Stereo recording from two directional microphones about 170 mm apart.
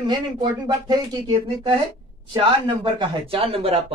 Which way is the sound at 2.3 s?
30° right (ahead or behind).